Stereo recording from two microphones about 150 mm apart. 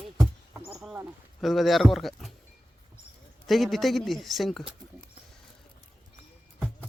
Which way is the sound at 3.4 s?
Centre (ahead or behind).